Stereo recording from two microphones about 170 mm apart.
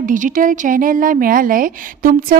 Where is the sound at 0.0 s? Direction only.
50° right (ahead or behind).